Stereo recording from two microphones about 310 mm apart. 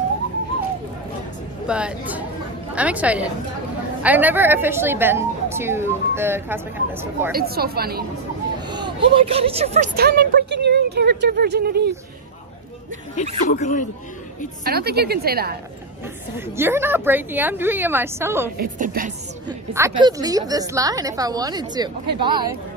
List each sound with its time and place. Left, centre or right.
1.7 s a woman's voice: centre
7.3 s speech: right
8.6 s speech: centre; by 11.9 s right
13.5 s speech: left
14.6 s a woman's voice: right
16.3 s a woman's voice: centre
18.6 s speech: right
19.4 s a woman's voice: centre